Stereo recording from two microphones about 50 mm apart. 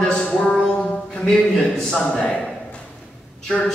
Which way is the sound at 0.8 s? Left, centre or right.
Centre.